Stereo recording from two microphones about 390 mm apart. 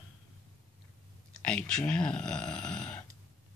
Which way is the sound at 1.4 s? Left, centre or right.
Centre.